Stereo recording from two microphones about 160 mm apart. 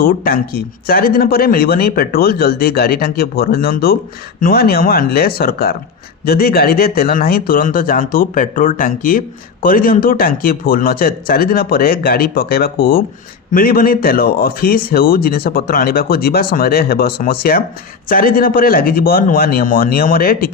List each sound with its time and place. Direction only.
0.0 s a man's voice: 70° left (ahead or behind)